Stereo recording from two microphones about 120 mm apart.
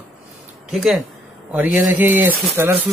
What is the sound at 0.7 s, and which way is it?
Speech, centre (ahead or behind).